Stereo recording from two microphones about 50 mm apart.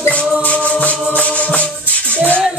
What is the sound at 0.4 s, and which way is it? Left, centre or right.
Music, left.